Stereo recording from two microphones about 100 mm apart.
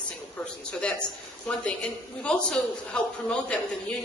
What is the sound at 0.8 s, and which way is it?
A woman's voice, 10° left (ahead or behind).